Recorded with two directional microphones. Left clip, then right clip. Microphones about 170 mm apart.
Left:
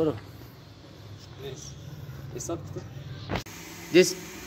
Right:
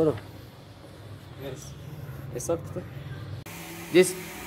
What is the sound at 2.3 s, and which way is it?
Speech, 40° right (ahead or behind).